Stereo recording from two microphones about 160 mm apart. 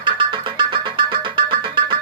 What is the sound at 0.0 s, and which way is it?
Music, 30° right (ahead or behind).